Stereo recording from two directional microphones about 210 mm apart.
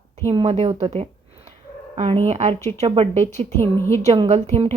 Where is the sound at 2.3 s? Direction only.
30° right (ahead or behind).